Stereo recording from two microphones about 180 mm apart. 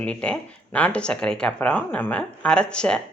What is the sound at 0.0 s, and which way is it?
Speech, 5° left (ahead or behind).